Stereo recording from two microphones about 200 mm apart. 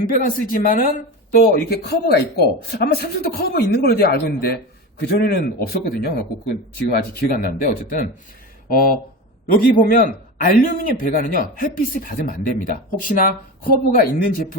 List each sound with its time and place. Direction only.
0.0 s a man's voice: 45° left (ahead or behind)